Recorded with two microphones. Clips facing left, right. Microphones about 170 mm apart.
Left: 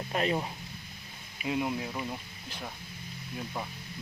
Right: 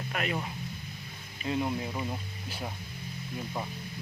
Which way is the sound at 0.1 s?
30° left (ahead or behind).